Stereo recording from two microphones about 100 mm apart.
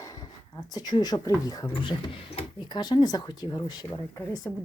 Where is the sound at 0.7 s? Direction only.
45° left (ahead or behind).